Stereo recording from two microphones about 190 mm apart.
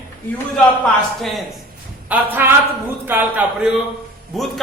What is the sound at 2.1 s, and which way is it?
A man's voice, 10° right (ahead or behind).